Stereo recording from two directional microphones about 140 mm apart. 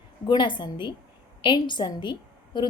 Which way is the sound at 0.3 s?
35° left (ahead or behind).